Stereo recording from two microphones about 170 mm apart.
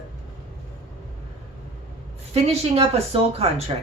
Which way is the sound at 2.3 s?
35° right (ahead or behind).